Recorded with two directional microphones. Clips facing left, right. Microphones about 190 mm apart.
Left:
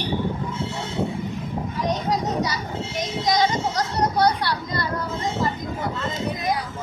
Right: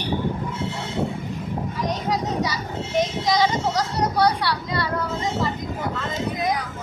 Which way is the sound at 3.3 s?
45° left (ahead or behind).